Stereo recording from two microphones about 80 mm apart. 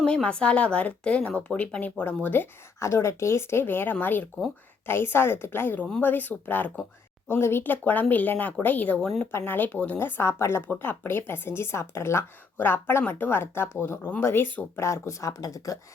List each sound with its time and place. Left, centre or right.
0.0 s speech: centre
2.7 s speech: left
14.8 s speech: left